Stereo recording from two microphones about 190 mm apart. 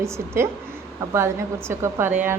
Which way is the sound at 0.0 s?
15° right (ahead or behind).